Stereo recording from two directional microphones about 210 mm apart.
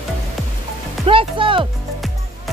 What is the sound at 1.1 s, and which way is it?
Music, 25° right (ahead or behind).